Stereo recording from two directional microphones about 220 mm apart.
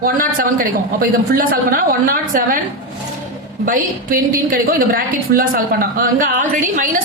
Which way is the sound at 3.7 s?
40° right (ahead or behind).